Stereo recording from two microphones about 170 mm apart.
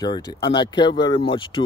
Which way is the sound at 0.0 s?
25° left (ahead or behind).